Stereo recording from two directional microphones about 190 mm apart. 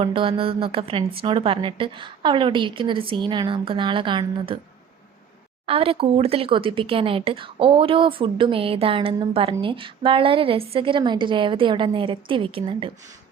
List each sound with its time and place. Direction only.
0.0 s speech: 30° right (ahead or behind)
5.6 s speech: 30° right (ahead or behind)